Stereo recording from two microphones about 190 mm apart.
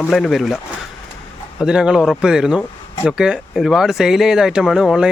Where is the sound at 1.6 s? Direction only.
5° right (ahead or behind).